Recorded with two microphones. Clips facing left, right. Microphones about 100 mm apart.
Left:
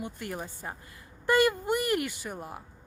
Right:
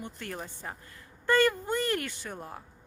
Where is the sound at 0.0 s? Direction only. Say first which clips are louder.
Left 3 dB; 10° left (ahead or behind).